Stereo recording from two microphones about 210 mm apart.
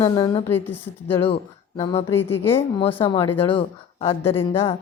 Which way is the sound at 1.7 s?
20° left (ahead or behind).